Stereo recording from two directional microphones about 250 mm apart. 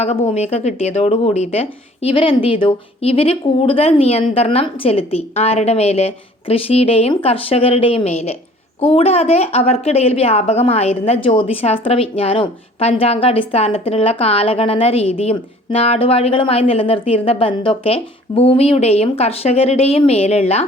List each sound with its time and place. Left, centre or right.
0.0 s a woman's voice: left